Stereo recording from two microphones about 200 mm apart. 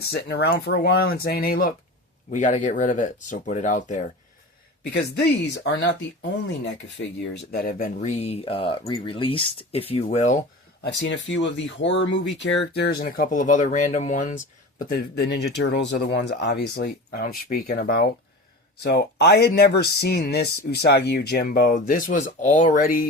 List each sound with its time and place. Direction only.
0.1 s speech: 55° left (ahead or behind); by 4.0 s 35° left (ahead or behind)
4.9 s speech: 60° left (ahead or behind)
7.5 s speech: 45° left (ahead or behind)
8.2 s speech: 30° left (ahead or behind)
11.0 s speech: 60° left (ahead or behind); by 14.9 s 40° left (ahead or behind)
15.1 s speech: 55° left (ahead or behind)